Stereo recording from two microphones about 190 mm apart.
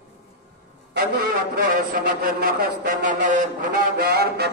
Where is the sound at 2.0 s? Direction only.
45° right (ahead or behind).